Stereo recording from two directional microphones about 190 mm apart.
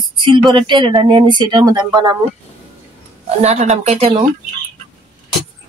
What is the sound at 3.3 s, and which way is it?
Speech, 35° right (ahead or behind).